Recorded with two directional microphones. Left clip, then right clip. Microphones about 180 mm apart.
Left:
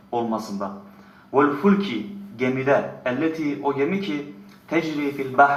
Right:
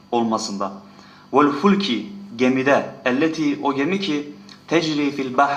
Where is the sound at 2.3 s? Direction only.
25° right (ahead or behind).